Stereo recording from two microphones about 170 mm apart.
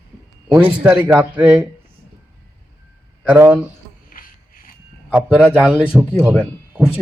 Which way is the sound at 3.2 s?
10° right (ahead or behind).